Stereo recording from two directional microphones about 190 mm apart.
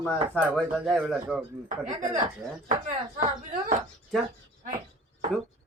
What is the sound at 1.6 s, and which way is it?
Speech, 40° right (ahead or behind).